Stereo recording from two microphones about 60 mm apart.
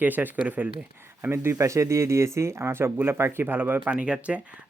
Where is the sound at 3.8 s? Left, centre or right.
Right.